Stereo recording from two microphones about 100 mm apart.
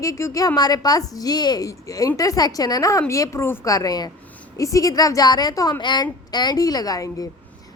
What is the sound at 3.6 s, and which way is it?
A woman's voice, 35° left (ahead or behind).